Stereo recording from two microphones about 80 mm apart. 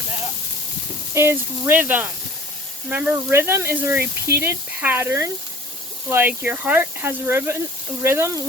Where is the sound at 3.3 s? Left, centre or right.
Right.